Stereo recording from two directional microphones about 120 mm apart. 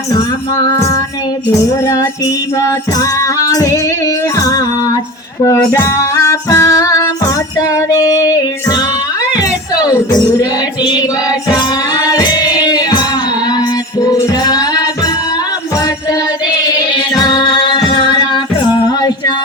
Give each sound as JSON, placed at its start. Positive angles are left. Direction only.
{"t": 2.6, "sound": "music", "side_deg": 25}
{"t": 11.5, "sound": "music", "side_deg": 30}
{"t": 16.9, "sound": "music", "side_deg": 35}